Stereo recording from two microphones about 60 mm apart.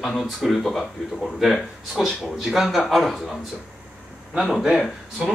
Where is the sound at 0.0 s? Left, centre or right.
Centre.